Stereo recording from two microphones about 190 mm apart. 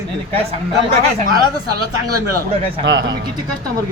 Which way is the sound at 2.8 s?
75° right (ahead or behind).